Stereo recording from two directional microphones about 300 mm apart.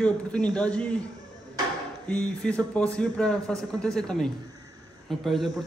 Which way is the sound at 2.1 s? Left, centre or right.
Centre.